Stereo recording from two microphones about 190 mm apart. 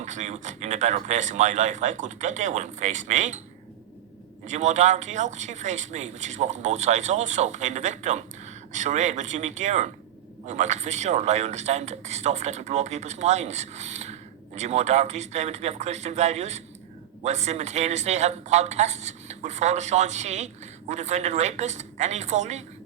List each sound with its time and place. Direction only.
0.0 s a man's voice: 40° right (ahead or behind)
4.4 s a man's voice: 40° right (ahead or behind)